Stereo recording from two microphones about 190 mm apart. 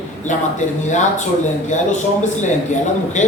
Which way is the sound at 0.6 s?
40° left (ahead or behind).